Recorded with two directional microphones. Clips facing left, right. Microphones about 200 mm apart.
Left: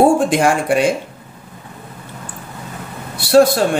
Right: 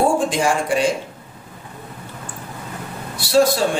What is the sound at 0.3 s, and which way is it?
Speech, 60° left (ahead or behind).